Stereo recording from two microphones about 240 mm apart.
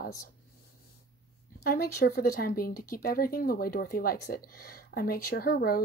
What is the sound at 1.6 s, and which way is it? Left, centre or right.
Speech, left.